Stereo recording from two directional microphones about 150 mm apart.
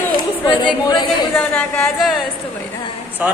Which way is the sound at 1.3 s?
15° left (ahead or behind).